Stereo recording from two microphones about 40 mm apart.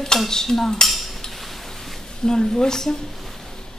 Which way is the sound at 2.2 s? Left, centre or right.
Centre.